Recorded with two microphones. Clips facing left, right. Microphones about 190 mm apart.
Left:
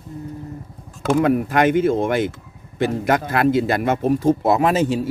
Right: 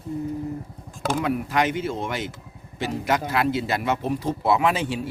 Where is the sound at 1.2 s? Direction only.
50° left (ahead or behind).